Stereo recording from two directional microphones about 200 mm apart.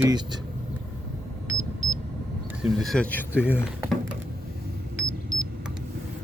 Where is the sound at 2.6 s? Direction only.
Centre (ahead or behind).